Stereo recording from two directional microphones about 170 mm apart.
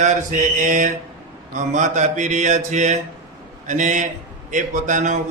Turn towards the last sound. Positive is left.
turn(degrees=-45)  # may be behind; listen again after turning